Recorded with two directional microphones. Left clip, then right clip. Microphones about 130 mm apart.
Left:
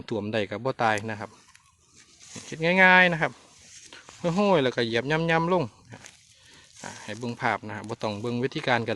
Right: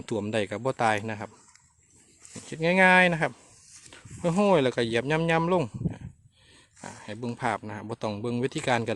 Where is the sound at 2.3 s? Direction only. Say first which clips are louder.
Left 1 dB; 10° right (ahead or behind).